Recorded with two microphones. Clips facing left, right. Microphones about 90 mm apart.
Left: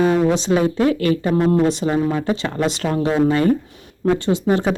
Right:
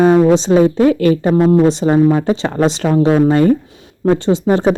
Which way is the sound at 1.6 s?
30° right (ahead or behind).